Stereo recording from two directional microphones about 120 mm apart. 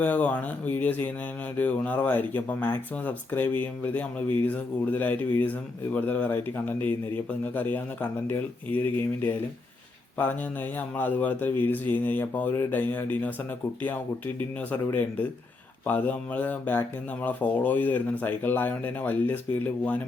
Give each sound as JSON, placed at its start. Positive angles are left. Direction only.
{"t": 0.0, "sound": "speech", "side_deg": 15}
{"t": 15.9, "sound": "speech", "side_deg": 15}